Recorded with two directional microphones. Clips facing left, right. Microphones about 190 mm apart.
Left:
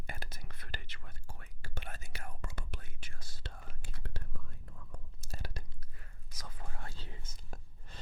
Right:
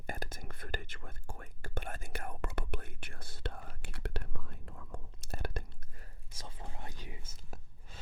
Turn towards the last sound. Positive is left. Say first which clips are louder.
# even
turn(degrees=-5)  # may be behind; listen again after turning